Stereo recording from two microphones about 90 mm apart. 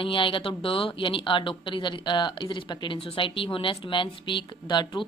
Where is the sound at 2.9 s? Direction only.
80° left; by 5.1 s 55° left (ahead or behind).